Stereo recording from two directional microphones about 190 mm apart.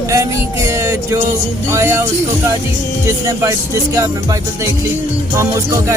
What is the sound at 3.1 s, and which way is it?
Speech, 15° right (ahead or behind).